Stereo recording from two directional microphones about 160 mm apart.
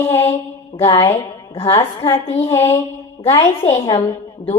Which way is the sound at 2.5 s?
15° left (ahead or behind).